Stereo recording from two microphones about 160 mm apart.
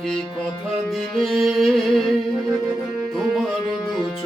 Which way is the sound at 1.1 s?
Centre (ahead or behind).